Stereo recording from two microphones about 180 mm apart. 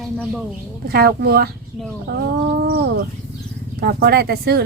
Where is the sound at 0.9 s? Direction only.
60° right (ahead or behind).